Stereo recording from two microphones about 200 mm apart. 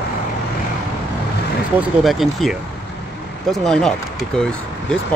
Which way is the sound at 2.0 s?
Centre (ahead or behind).